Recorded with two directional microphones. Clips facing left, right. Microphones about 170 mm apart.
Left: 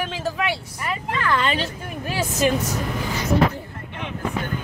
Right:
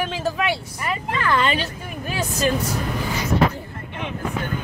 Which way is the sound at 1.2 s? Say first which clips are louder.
Right 2 dB; 15° right (ahead or behind).